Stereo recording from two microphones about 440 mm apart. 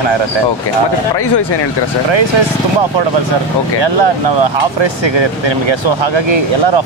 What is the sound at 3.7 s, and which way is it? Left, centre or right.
Speech, right.